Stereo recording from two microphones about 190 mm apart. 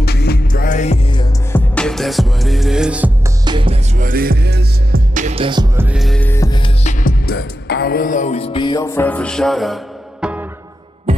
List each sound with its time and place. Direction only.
0.0 s music: 55° left (ahead or behind); by 0.9 s 40° left (ahead or behind)
1.0 s music: 25° left (ahead or behind)
1.5 s music: 5° left (ahead or behind)
3.4 s music: 25° right (ahead or behind)
3.9 s music: 45° right (ahead or behind)
5.1 s music: 35° right (ahead or behind)
5.8 s music: 5° right (ahead or behind); by 6.7 s 20° left (ahead or behind)
6.8 s music: 40° left (ahead or behind); by 10.4 s 5° right (ahead or behind)